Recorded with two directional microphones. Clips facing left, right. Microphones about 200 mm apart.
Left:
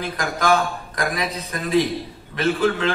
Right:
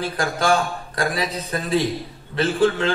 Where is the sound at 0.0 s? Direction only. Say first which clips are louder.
Right 1 dB; 30° right (ahead or behind).